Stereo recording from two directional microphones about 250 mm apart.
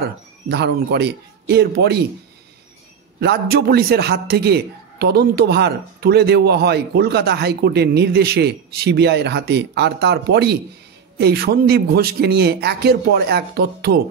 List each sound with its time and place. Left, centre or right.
0.0 s speech: right
3.2 s a man's voice: right